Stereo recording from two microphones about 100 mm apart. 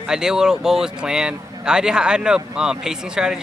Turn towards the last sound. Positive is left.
turn(degrees=-5)  # may be behind; listen again after turning